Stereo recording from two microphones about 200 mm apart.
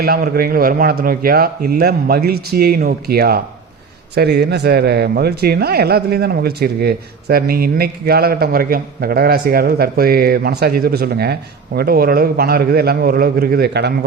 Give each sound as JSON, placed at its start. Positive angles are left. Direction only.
{"t": 0.0, "sound": "speech", "side_deg": -50}